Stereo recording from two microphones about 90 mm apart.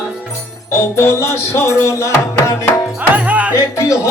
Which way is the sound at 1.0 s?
30° left (ahead or behind).